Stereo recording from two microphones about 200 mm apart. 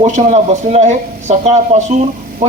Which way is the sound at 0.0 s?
35° right (ahead or behind).